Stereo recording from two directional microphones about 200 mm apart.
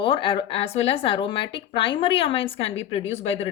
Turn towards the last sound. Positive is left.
turn(degrees=30)  # may be behind; listen again after turning